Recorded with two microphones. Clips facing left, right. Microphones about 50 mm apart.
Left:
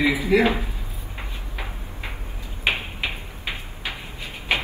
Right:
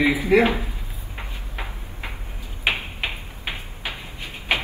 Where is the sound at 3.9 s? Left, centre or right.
Right.